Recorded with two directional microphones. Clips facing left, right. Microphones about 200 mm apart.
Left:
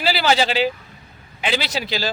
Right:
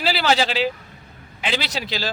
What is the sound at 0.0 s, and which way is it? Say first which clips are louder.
A man's voice: left 1 dB; centre (ahead or behind).